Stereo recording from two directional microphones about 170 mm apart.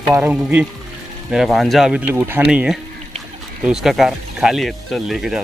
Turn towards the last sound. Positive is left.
turn(degrees=0)  # may be behind; listen again after turning